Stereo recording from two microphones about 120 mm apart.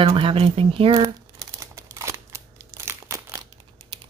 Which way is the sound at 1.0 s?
25° right (ahead or behind).